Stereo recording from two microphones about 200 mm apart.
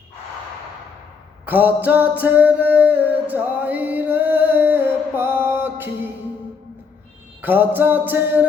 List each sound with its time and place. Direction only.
1.5 s music: 10° right (ahead or behind)
7.4 s music: 10° right (ahead or behind)